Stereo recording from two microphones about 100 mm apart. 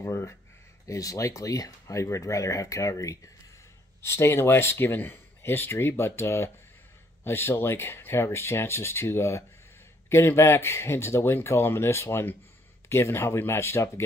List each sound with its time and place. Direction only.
0.0 s speech: 25° left (ahead or behind)